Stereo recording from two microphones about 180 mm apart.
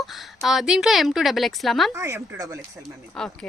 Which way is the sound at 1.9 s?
15° right (ahead or behind).